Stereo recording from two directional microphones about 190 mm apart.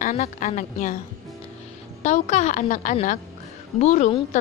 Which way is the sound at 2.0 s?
40° left (ahead or behind).